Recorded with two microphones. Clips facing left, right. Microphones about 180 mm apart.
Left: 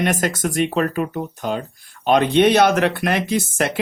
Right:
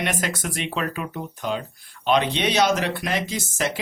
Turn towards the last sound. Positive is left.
turn(degrees=60)  # may be behind; listen again after turning